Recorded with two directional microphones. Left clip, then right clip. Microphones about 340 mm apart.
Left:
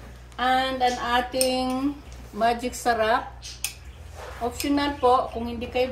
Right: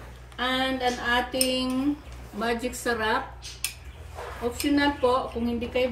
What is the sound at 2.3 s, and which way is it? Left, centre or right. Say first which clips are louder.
Speech: left 5 dB; centre.